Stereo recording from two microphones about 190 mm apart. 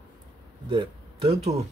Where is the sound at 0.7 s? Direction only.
30° right (ahead or behind).